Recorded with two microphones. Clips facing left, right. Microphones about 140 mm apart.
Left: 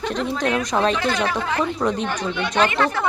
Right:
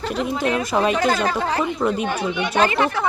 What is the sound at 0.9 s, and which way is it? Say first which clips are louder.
Speech: right 2 dB; 40° right (ahead or behind).